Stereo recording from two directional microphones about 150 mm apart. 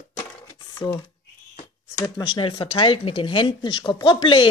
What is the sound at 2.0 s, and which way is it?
Speech, 25° left (ahead or behind).